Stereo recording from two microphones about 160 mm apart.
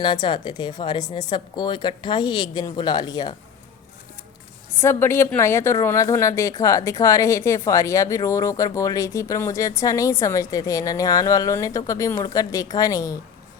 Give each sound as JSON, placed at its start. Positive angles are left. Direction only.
{"t": 0.0, "sound": "speech", "side_deg": 30}
{"t": 4.8, "sound": "speech", "side_deg": 15}